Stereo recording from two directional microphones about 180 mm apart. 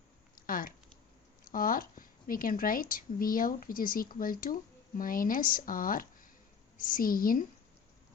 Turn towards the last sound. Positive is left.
turn(degrees=50)  # may be behind; listen again after turning